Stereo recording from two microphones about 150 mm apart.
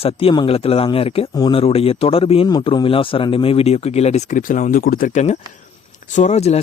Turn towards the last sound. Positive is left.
turn(degrees=45)  # may be behind; listen again after turning